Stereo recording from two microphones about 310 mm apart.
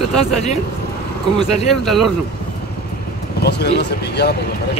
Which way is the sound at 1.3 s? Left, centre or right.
Centre.